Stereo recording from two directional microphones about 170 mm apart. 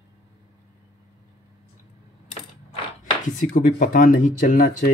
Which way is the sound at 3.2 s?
50° left (ahead or behind).